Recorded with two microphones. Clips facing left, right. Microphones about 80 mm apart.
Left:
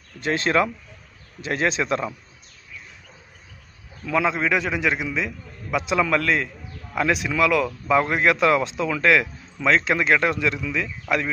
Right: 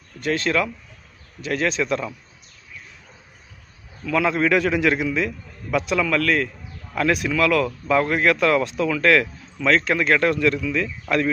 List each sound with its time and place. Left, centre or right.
0.2 s a man's voice: left
4.0 s speech: centre
5.9 s a man's voice: left